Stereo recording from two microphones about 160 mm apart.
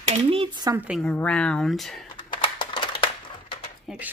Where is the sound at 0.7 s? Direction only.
10° right (ahead or behind).